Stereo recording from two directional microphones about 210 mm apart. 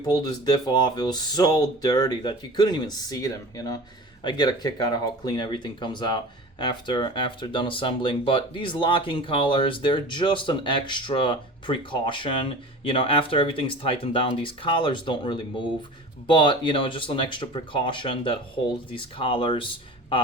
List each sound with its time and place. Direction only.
0.0 s speech: 20° left (ahead or behind)